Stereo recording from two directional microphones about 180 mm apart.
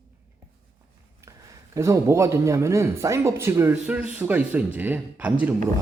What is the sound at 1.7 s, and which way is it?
Speech, 15° right (ahead or behind).